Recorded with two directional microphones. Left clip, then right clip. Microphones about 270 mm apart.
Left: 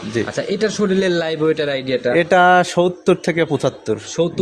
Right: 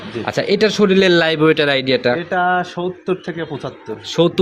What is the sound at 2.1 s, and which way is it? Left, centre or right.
A man's voice, left.